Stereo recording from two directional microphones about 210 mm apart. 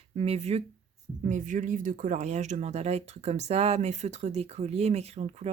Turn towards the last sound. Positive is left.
turn(degrees=-30)  # may be behind; listen again after turning